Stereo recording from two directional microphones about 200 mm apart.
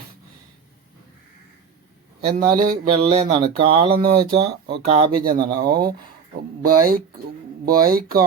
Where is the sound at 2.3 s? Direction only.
45° right (ahead or behind).